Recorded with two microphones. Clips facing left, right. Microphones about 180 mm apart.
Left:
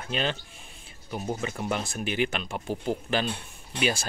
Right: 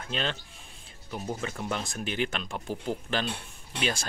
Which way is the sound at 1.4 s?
5° left (ahead or behind).